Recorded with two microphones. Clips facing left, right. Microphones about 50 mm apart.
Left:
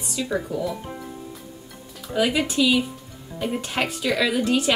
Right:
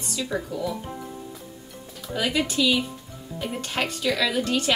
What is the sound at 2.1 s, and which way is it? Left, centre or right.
A woman's voice, centre.